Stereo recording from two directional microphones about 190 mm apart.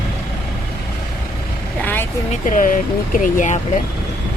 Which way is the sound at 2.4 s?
45° left (ahead or behind).